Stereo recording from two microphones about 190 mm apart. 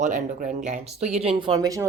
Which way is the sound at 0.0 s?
45° right (ahead or behind).